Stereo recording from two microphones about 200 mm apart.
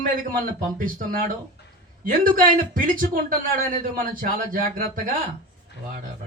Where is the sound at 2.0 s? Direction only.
45° right (ahead or behind).